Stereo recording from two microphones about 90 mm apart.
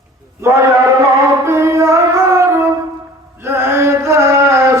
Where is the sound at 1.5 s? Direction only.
30° right (ahead or behind).